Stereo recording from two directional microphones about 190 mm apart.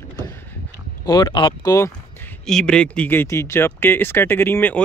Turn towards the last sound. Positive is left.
turn(degrees=10)  # may be behind; listen again after turning